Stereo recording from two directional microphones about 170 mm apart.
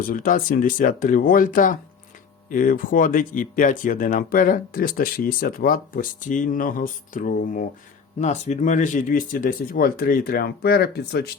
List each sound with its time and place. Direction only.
0.0 s speech: 55° left (ahead or behind)
8.2 s speech: 40° left (ahead or behind); by 11.3 s 70° left (ahead or behind)